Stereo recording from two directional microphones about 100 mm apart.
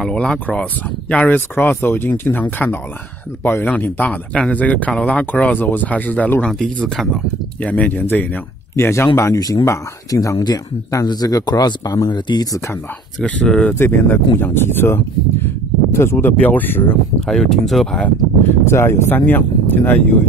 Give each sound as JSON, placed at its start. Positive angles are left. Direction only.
{"t": 0.0, "sound": "speech", "side_deg": 5}
{"t": 13.2, "sound": "speech", "side_deg": 10}
{"t": 17.3, "sound": "speech", "side_deg": 5}
{"t": 18.7, "sound": "speech", "side_deg": 25}